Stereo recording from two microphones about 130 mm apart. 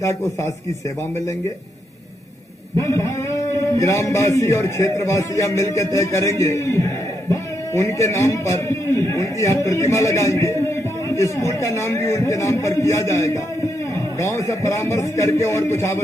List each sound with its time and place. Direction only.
0.0 s a man's voice: 20° left (ahead or behind)
2.8 s a man's voice: 20° left (ahead or behind)